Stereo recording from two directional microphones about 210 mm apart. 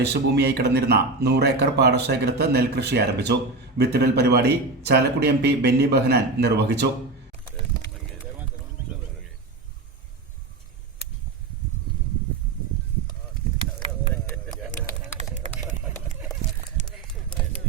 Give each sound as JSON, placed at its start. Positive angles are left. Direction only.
{"t": 0.1, "sound": "speech", "side_deg": -50}
{"t": 15.4, "sound": "vehicle", "side_deg": -30}